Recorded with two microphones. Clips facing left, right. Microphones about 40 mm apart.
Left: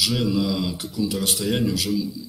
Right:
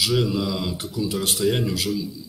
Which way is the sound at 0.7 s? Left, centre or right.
Right.